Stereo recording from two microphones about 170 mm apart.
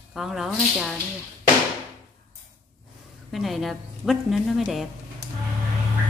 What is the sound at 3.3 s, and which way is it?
A woman's voice, centre (ahead or behind).